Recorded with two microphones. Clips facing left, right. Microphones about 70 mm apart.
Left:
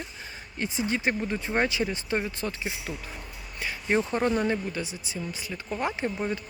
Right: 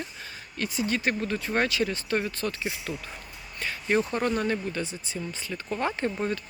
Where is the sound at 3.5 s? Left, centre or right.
Centre.